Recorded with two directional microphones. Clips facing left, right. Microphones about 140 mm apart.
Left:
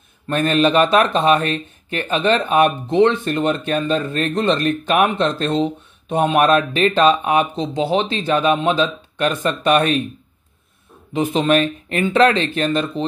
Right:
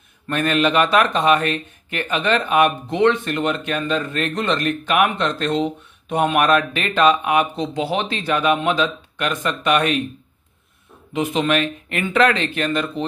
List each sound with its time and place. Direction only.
0.3 s speech: 35° left (ahead or behind)
11.1 s speech: 35° left (ahead or behind)